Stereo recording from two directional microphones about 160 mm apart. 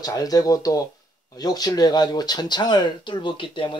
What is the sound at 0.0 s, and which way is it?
Speech, 25° left (ahead or behind).